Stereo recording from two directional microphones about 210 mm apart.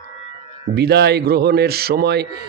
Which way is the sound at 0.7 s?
50° right (ahead or behind).